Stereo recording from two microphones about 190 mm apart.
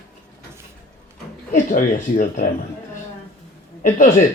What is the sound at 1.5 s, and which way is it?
Speech, 45° left (ahead or behind).